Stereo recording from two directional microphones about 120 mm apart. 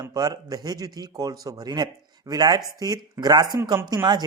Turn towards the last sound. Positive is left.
turn(degrees=-35)  # may be behind; listen again after turning